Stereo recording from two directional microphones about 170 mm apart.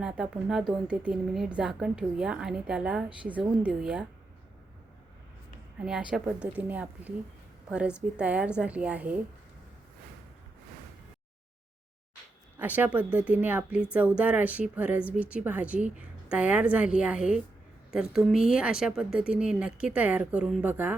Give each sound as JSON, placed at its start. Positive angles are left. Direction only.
{"t": 0.0, "sound": "a woman's voice", "side_deg": -5}
{"t": 5.8, "sound": "a woman's voice", "side_deg": -5}
{"t": 12.5, "sound": "a woman's voice", "side_deg": -10}